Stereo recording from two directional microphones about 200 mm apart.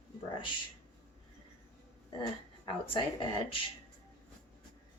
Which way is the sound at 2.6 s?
25° left (ahead or behind).